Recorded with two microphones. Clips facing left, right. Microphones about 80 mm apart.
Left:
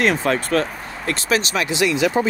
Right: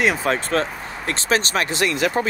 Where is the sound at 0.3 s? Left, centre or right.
Right.